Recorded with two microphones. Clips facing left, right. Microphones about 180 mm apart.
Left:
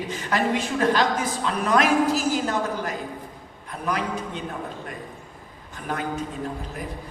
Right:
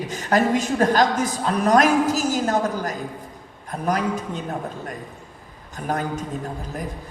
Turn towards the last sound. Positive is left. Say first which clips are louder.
# right 4 dB
turn(degrees=-45)  # may be behind; listen again after turning